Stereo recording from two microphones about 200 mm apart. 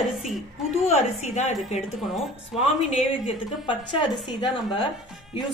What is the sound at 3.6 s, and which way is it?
Speech, 25° left (ahead or behind).